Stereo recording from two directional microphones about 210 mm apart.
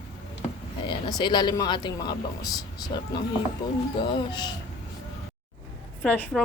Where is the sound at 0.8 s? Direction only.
20° left (ahead or behind).